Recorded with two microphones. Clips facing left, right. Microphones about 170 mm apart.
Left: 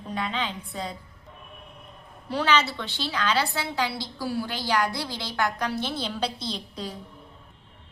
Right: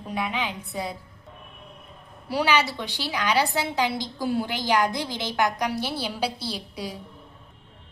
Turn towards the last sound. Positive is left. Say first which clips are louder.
# right 1 dB
turn(degrees=-10)  # may be behind; listen again after turning